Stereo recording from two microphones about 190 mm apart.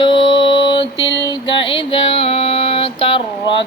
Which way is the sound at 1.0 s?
70° left (ahead or behind).